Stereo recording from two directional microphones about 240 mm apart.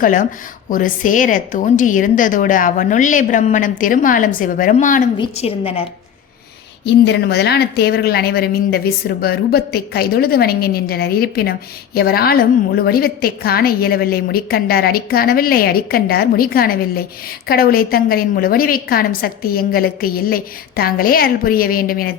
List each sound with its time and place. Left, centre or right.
0.0 s a woman's voice: left
5.1 s a woman's voice: left
6.8 s a woman's voice: left